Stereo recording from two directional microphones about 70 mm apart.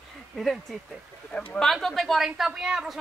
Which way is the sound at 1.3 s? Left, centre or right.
Centre.